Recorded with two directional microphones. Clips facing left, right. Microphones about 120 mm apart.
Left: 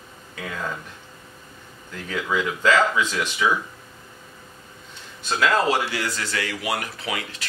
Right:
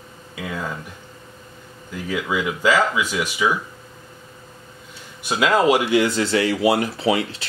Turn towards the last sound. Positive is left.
turn(degrees=-30)  # may be behind; listen again after turning